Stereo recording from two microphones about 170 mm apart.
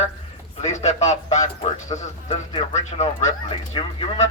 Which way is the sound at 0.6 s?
40° left (ahead or behind).